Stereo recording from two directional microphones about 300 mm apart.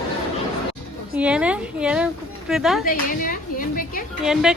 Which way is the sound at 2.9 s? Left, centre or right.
Left.